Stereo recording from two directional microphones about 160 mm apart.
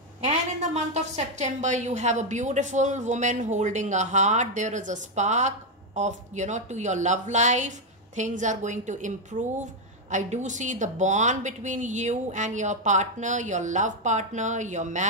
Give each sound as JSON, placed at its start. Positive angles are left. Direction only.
{"t": 0.2, "sound": "a woman's voice", "side_deg": -45}